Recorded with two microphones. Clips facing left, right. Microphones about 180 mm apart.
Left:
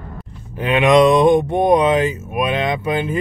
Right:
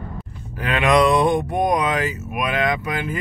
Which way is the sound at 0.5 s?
20° left (ahead or behind).